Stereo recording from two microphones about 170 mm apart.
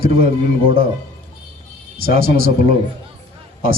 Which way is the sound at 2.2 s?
60° right (ahead or behind).